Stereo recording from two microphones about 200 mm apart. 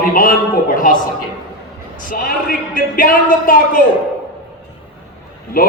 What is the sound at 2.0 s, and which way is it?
A man's voice, 45° left (ahead or behind).